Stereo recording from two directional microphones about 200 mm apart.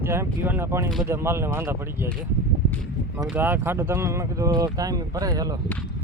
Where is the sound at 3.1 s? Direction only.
10° right (ahead or behind).